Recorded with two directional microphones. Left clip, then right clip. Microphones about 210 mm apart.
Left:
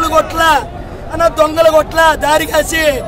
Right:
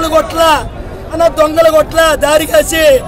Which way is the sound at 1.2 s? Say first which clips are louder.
Right 2 dB; 5° left (ahead or behind).